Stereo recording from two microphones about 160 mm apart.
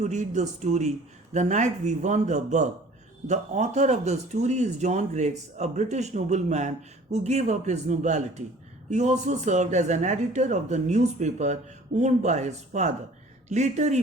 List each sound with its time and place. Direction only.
0.0 s speech: 45° right (ahead or behind)